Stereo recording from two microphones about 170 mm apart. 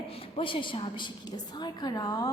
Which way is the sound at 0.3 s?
30° left (ahead or behind).